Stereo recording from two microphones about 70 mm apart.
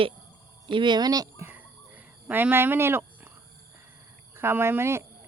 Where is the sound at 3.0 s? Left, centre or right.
Right.